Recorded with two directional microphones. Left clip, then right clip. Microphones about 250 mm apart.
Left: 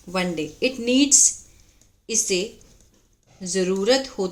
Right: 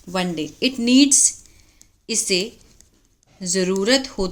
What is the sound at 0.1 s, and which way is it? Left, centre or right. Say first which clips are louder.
A woman's voice: right 1 dB; centre.